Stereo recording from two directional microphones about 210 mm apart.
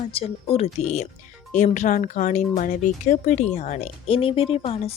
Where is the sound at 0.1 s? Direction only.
25° left (ahead or behind).